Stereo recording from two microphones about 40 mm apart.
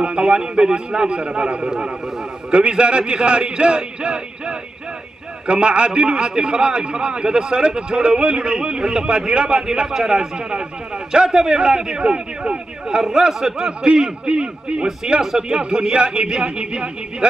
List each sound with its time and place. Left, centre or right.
0.0 s a man's voice: right
13.3 s speech: centre
13.7 s a man's voice: centre